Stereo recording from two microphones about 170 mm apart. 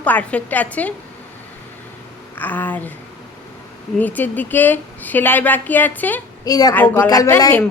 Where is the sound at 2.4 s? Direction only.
10° left (ahead or behind).